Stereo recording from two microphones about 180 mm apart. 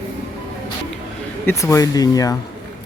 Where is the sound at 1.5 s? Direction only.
15° left (ahead or behind).